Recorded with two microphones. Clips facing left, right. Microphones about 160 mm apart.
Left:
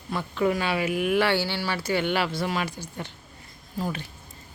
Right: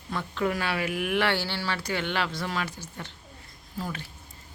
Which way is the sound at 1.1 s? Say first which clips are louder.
Left 2 dB; 10° left (ahead or behind).